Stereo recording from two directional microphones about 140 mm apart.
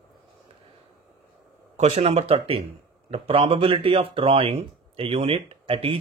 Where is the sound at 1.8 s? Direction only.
50° right (ahead or behind).